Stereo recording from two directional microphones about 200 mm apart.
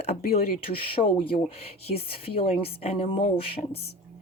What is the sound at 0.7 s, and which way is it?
Speech, 25° left (ahead or behind).